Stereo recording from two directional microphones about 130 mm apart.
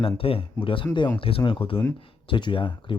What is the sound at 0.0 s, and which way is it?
Speech, 45° left (ahead or behind).